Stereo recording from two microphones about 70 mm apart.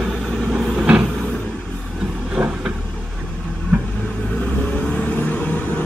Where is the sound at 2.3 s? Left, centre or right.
Centre.